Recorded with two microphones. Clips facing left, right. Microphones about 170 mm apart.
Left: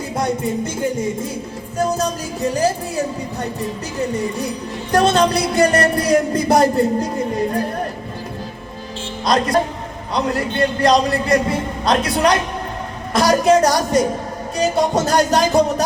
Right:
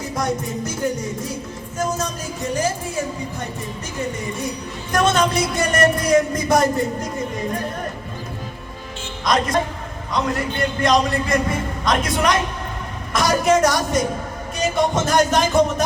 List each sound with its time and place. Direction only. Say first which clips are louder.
1.8 s music: left 4 dB; 35° left (ahead or behind)
4.9 s music: left 4 dB; 35° left (ahead or behind)
9.2 s music: left 3 dB; 35° left (ahead or behind)